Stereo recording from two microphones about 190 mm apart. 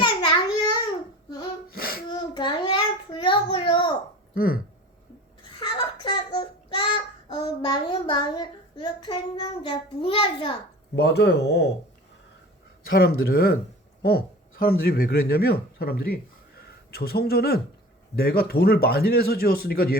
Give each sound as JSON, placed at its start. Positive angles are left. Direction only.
{"t": 0.0, "sound": "a sound", "side_deg": 25}
{"t": 1.7, "sound": "a sound", "side_deg": 50}
{"t": 2.0, "sound": "child singing", "side_deg": 25}
{"t": 4.4, "sound": "speech", "side_deg": 50}
{"t": 5.5, "sound": "child singing", "side_deg": 25}
{"t": 10.9, "sound": "speech", "side_deg": 60}
{"t": 12.9, "sound": "speech", "side_deg": 55}
{"t": 14.6, "sound": "speech", "side_deg": 50}